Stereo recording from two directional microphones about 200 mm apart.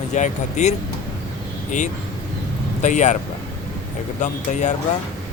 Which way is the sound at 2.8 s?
35° left (ahead or behind).